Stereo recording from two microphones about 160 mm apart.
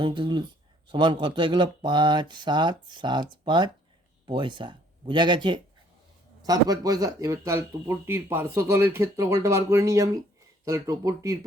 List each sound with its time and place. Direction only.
0.0 s speech: 30° right (ahead or behind)